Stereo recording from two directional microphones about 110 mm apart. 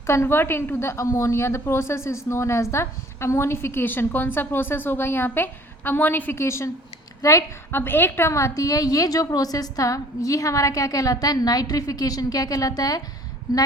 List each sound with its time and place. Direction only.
0.1 s a woman's voice: 20° left (ahead or behind)